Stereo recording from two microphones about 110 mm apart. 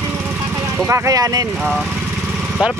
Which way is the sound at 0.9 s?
35° right (ahead or behind).